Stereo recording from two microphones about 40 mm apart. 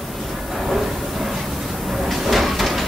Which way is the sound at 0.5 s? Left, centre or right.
Centre.